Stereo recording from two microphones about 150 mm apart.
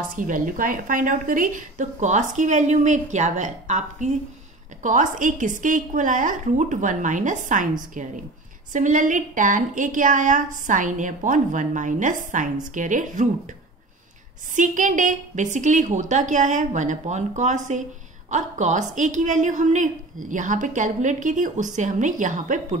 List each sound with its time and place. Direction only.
0.1 s a woman's voice: 65° right (ahead or behind)
14.5 s a woman's voice: 60° right (ahead or behind)